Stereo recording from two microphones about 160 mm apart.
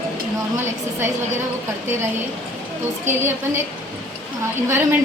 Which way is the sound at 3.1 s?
15° right (ahead or behind).